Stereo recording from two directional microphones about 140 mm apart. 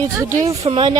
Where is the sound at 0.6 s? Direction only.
40° right (ahead or behind).